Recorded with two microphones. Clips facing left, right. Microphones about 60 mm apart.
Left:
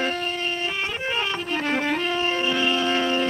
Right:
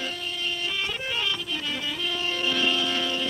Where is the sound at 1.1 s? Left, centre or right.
Left.